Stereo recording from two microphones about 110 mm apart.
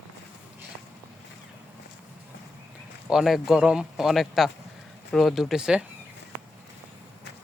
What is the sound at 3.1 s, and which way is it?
A man's voice, 5° right (ahead or behind).